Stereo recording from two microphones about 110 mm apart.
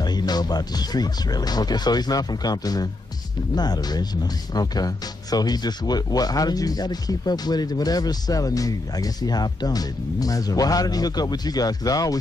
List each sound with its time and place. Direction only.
0.0 s speech: 40° left (ahead or behind)